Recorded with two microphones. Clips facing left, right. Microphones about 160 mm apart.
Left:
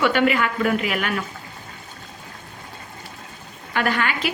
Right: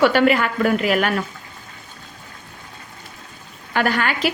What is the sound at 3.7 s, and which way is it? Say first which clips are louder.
Speech: right 2 dB; 40° right (ahead or behind).